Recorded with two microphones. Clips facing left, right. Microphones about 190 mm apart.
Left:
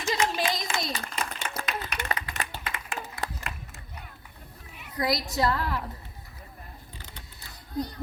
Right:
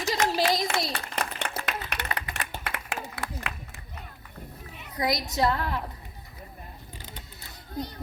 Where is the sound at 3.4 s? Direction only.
70° right (ahead or behind).